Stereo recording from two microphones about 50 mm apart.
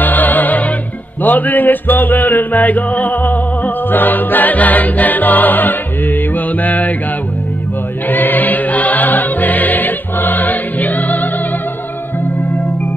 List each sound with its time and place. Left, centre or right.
0.0 s music: left
1.2 s chant: left
8.1 s music: left